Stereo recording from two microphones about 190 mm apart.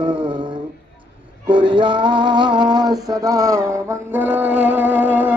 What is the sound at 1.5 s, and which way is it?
Music, 25° right (ahead or behind).